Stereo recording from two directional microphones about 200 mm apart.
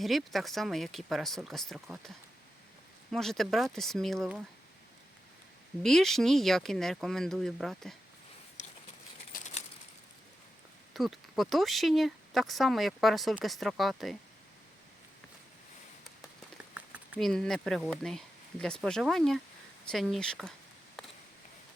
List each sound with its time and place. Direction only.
0.0 s speech: centre (ahead or behind)
5.8 s speech: centre (ahead or behind)
9.3 s a sound: 45° left (ahead or behind)
10.9 s speech: centre (ahead or behind)
16.7 s speech: 5° right (ahead or behind)